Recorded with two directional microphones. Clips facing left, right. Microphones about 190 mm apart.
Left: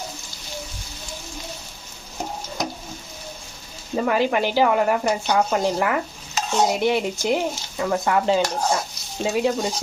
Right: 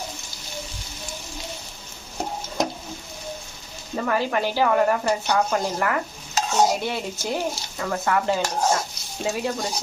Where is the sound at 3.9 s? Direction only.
20° left (ahead or behind).